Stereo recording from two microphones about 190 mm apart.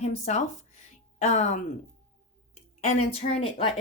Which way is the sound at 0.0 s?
35° left (ahead or behind).